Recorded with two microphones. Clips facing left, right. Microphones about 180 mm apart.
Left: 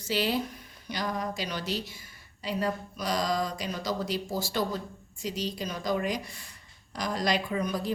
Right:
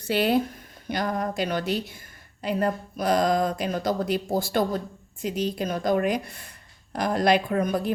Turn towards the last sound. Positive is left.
turn(degrees=-55)  # may be behind; listen again after turning